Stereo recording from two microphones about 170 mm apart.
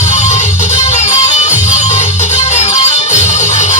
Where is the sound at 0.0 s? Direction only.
40° left (ahead or behind).